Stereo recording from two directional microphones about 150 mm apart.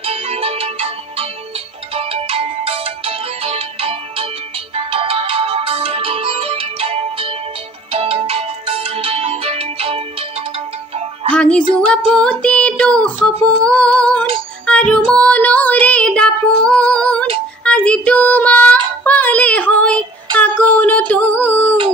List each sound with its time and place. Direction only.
0.0 s music: 40° right (ahead or behind)
11.2 s music: 10° left (ahead or behind)
12.1 s child singing: 5° left (ahead or behind)
13.4 s music: 5° left (ahead or behind)
15.1 s female singing: 10° left (ahead or behind)
17.6 s child singing: 5° left (ahead or behind)
20.3 s a sound: 10° left (ahead or behind)